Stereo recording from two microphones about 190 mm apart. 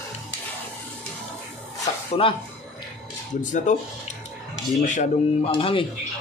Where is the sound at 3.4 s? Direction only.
40° left (ahead or behind).